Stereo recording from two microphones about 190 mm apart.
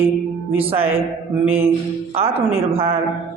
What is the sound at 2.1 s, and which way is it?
Speech, 30° right (ahead or behind).